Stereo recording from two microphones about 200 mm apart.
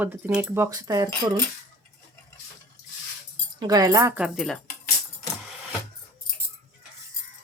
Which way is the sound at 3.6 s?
20° right (ahead or behind).